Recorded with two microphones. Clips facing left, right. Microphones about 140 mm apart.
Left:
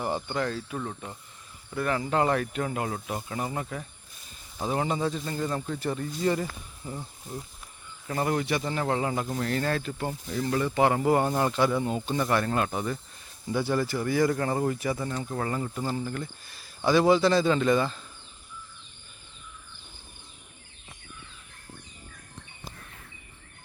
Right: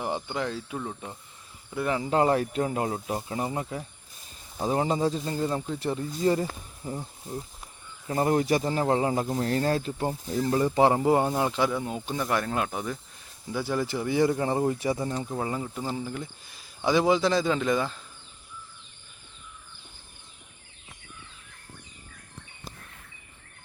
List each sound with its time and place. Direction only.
0.0 s speech: 10° right (ahead or behind); by 6.6 s 30° right (ahead or behind)
6.8 s speech: 15° right (ahead or behind)
11.3 s speech: 5° right (ahead or behind)
11.7 s speech: centre (ahead or behind)
13.8 s speech: 20° right (ahead or behind)
14.8 s speech: 30° right (ahead or behind)
15.3 s speech: 10° right (ahead or behind)